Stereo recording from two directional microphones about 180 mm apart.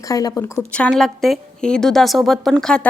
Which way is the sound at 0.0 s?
20° left (ahead or behind).